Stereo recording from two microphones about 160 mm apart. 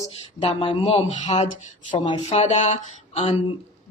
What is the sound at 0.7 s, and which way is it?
Speech, 45° left (ahead or behind).